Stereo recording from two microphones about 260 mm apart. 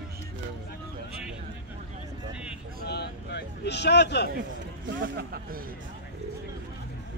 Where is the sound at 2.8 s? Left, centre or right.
Left.